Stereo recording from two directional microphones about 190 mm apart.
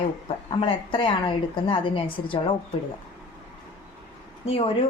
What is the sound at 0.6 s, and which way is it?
A woman's voice, 25° left (ahead or behind).